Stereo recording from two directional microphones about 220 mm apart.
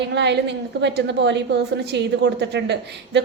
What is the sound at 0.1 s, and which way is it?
A woman's voice, 50° right (ahead or behind).